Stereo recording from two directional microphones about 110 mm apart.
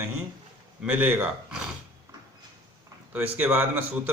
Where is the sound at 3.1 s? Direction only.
15° right (ahead or behind).